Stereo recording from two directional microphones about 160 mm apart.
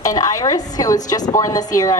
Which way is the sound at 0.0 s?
20° left (ahead or behind).